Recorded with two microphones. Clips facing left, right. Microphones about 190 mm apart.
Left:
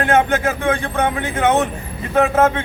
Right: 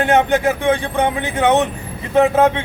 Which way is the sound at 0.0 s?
15° right (ahead or behind).